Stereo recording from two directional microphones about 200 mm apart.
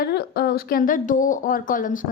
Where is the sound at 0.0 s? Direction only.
50° left (ahead or behind).